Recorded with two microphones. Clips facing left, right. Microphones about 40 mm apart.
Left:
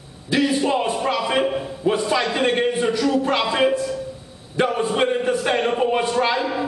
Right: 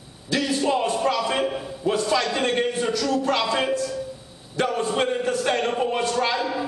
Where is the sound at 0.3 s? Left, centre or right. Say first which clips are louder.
Left 3 dB; centre.